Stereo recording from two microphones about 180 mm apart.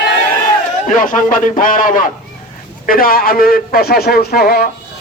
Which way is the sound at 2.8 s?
55° left (ahead or behind).